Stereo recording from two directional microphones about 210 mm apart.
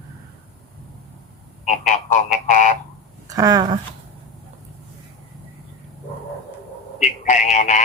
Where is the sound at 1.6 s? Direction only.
35° left (ahead or behind).